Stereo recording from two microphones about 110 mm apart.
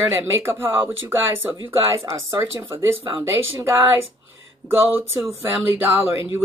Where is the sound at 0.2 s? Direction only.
20° right (ahead or behind).